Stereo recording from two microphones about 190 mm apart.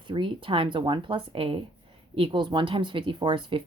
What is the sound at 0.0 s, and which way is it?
Speech, 25° right (ahead or behind).